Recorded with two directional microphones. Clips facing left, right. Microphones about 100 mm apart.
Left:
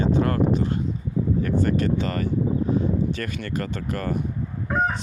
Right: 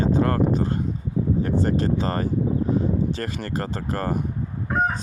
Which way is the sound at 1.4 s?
30° right (ahead or behind).